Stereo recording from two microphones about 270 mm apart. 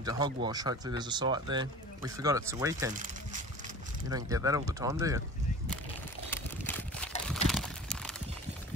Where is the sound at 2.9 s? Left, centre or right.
Right.